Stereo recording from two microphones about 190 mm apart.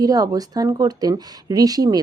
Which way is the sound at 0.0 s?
20° right (ahead or behind).